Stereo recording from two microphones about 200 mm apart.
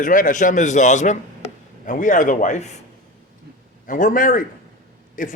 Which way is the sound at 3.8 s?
40° left (ahead or behind).